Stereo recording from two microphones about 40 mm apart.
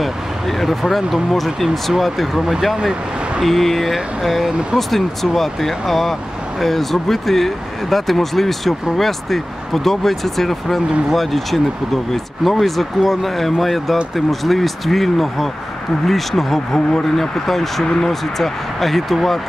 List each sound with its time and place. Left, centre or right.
0.0 s speech: centre
2.7 s speech: centre
3.4 s speech: centre
4.5 s speech: right
4.7 s speech: centre